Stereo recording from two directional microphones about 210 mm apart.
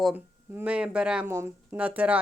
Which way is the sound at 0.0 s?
5° right (ahead or behind).